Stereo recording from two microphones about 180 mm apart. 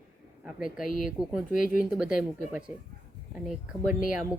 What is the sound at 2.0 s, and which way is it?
A woman's voice, 5° right (ahead or behind).